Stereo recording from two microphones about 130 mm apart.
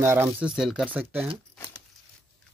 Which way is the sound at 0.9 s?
15° right (ahead or behind).